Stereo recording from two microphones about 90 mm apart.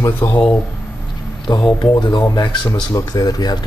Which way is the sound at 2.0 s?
55° left (ahead or behind).